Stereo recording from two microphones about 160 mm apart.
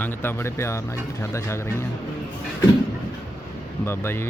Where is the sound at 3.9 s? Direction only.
15° left (ahead or behind).